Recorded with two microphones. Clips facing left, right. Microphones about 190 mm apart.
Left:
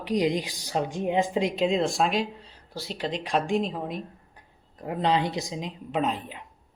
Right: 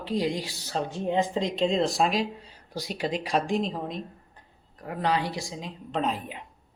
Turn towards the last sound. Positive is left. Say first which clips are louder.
# left 1 dB
turn(degrees=0)  # may be behind; listen again after turning